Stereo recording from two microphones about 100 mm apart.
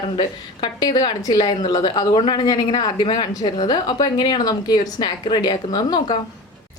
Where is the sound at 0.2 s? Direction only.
45° left (ahead or behind).